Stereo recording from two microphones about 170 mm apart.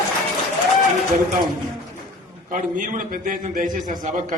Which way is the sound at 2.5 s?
50° right (ahead or behind).